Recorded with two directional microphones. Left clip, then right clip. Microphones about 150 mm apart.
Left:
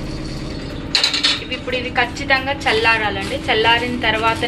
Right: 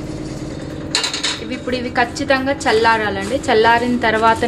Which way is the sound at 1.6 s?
80° right.